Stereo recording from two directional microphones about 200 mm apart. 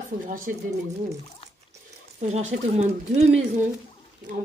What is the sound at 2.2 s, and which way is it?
Speech, 35° right (ahead or behind).